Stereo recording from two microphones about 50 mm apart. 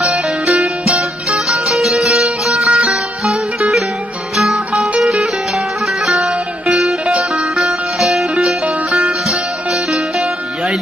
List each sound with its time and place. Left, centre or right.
0.0 s music: centre